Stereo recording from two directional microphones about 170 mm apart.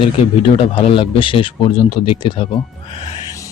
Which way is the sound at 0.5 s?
35° left (ahead or behind).